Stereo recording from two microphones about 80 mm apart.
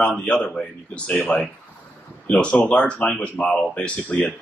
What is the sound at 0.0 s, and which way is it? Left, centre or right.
Speech, centre.